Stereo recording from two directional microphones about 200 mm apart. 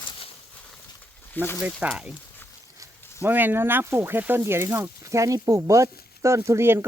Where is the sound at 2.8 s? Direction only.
15° right (ahead or behind).